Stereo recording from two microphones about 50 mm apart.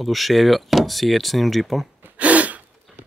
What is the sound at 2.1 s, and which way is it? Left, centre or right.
Gasp, right.